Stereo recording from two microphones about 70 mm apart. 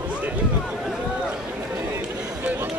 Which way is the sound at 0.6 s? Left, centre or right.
Centre.